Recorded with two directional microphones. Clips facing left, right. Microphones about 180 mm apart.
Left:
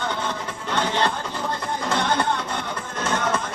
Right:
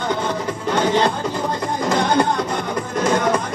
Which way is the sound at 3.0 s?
35° right (ahead or behind).